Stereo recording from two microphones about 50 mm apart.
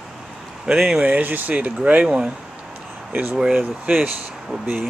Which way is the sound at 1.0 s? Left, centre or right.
Right.